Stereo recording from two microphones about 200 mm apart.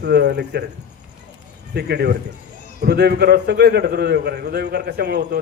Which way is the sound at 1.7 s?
55° right (ahead or behind).